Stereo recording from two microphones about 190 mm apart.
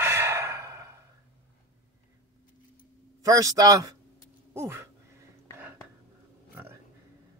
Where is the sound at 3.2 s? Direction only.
15° right (ahead or behind).